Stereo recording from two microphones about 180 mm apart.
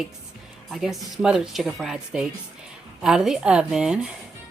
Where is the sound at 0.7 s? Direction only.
Centre (ahead or behind).